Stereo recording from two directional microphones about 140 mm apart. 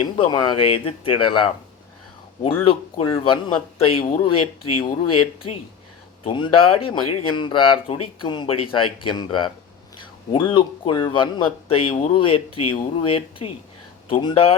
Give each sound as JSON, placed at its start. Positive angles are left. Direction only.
{"t": 0.0, "sound": "speech", "side_deg": 35}
{"t": 2.6, "sound": "speech", "side_deg": 35}
{"t": 6.2, "sound": "speech", "side_deg": 40}